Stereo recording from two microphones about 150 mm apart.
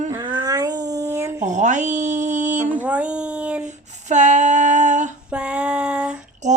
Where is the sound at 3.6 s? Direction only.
50° right (ahead or behind).